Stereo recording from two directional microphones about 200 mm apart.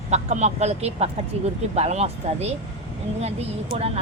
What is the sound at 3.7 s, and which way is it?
Speech, 30° right (ahead or behind).